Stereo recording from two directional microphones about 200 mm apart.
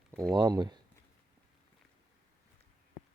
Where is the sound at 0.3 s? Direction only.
20° right (ahead or behind).